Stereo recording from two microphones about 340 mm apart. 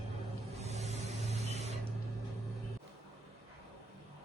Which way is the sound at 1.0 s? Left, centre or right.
Centre.